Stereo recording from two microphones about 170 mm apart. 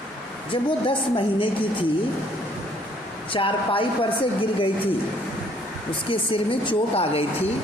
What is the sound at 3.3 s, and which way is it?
Speech, 30° left (ahead or behind).